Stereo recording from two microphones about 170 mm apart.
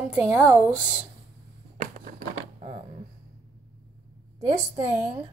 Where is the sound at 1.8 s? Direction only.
50° right (ahead or behind).